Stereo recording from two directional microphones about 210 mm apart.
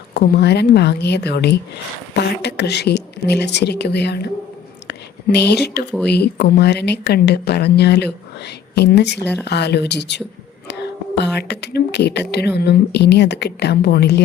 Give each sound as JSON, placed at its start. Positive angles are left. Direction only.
{"t": 0.1, "sound": "a woman's voice", "side_deg": 50}
{"t": 4.9, "sound": "whispering", "side_deg": 55}
{"t": 6.1, "sound": "a woman's voice", "side_deg": 50}